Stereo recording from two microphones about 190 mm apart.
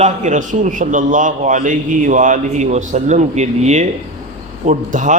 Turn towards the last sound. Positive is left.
turn(degrees=-40)  # may be behind; listen again after turning